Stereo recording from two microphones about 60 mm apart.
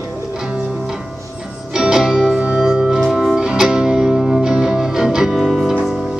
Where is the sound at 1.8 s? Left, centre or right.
Centre.